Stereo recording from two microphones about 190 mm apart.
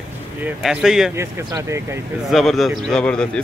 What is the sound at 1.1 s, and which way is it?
Speech, 15° right (ahead or behind).